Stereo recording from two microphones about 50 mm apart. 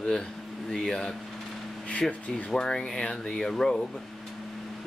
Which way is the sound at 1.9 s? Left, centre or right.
Left.